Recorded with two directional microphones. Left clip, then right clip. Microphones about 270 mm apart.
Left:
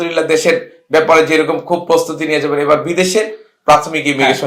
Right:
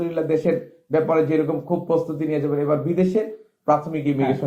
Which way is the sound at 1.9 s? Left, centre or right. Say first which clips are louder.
Left 9 dB; centre.